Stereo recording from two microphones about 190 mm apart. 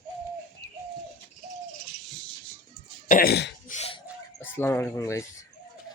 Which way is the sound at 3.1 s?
50° left (ahead or behind).